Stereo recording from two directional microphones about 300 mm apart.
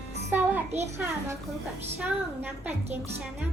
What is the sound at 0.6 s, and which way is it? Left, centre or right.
Speech, right.